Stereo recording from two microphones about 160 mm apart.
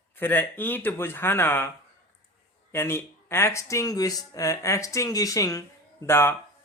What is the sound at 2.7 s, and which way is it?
Speech, 15° left (ahead or behind).